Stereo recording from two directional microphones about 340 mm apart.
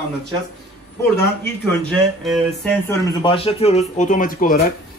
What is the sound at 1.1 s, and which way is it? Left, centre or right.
Speech, centre.